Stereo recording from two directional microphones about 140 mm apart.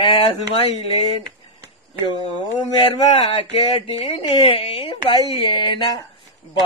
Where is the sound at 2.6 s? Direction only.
35° left (ahead or behind).